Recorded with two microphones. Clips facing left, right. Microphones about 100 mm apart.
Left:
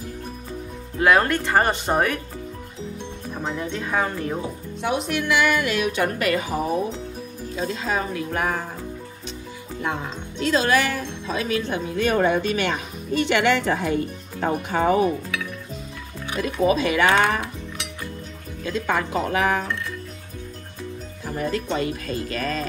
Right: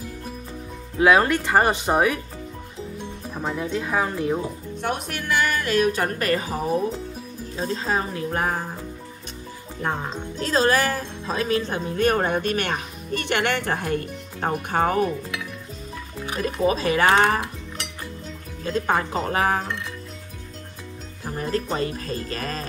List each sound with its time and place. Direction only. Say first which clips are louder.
0.9 s speech: right 1 dB; 10° right (ahead or behind)
3.3 s speech: right 2 dB; 5° right (ahead or behind)
4.8 s a woman's voice: left 4 dB; 50° right (ahead or behind)
7.5 s a woman's voice: even; 35° right (ahead or behind)
9.8 s speech: right 2 dB; 40° right (ahead or behind)
16.3 s a woman's voice: left 2 dB; 40° right (ahead or behind)
18.6 s speech: right 1 dB; 40° right (ahead or behind)
21.4 s a woman's voice: left 1 dB; 40° right (ahead or behind)